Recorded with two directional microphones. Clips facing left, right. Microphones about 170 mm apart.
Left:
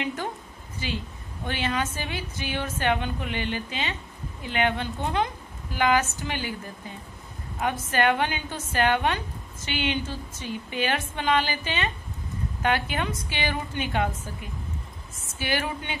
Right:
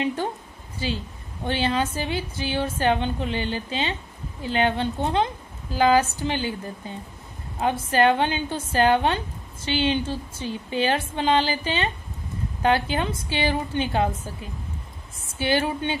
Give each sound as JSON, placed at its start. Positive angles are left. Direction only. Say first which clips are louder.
{"t": 0.0, "sound": "a woman's voice", "louder": "right 5 dB", "side_deg": -30}
{"t": 7.5, "sound": "a woman's voice", "louder": "right 4 dB", "side_deg": -30}